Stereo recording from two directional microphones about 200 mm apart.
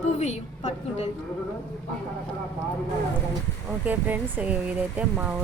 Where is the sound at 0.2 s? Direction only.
35° left (ahead or behind).